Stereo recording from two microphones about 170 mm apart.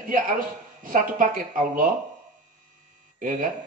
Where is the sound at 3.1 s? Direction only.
50° right (ahead or behind).